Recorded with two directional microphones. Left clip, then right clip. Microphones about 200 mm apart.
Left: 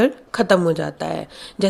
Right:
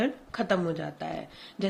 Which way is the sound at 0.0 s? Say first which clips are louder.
Left 12 dB; 50° left (ahead or behind).